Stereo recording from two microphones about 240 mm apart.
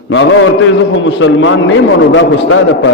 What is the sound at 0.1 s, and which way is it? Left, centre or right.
A man's voice, left.